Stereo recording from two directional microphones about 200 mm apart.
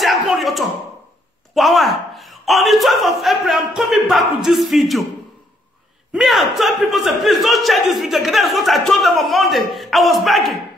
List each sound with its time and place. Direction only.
0.0 s a sound: centre (ahead or behind)
1.5 s a man's voice: centre (ahead or behind)
6.1 s a man's voice: centre (ahead or behind)